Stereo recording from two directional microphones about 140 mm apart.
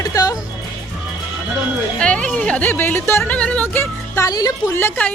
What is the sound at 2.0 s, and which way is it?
Speech, 5° left (ahead or behind).